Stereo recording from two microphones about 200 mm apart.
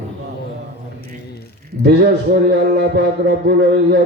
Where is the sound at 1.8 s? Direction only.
55° right (ahead or behind).